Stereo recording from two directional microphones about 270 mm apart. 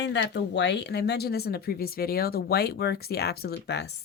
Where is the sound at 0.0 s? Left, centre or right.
Left.